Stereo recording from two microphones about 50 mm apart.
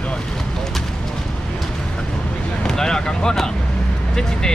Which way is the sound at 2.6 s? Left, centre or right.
Centre.